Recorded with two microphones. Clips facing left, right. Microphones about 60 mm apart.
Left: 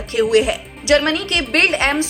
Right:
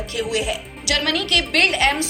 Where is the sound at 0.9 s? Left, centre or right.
Left.